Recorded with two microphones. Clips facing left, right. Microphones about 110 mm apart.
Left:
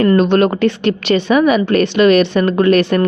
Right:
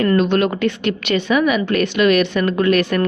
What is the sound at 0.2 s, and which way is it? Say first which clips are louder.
A woman's voice: left 4 dB; 35° left (ahead or behind).